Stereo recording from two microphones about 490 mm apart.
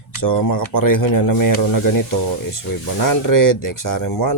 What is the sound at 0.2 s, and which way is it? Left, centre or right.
Speech, left.